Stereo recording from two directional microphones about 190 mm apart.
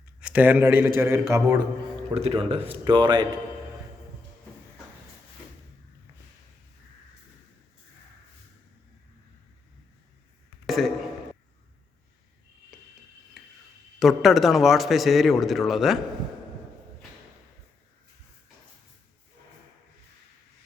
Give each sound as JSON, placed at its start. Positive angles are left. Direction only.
{"t": 0.2, "sound": "a man's voice", "side_deg": -5}
{"t": 2.0, "sound": "a man's voice", "side_deg": -30}
{"t": 10.7, "sound": "speech", "side_deg": 0}
{"t": 13.4, "sound": "a sound", "side_deg": 0}
{"t": 14.0, "sound": "speech", "side_deg": 0}